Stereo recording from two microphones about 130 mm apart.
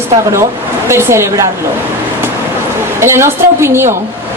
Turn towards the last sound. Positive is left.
turn(degrees=-20)  # may be behind; listen again after turning